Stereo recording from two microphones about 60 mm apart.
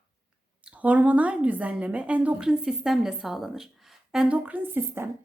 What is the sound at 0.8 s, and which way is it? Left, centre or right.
A woman's voice, right.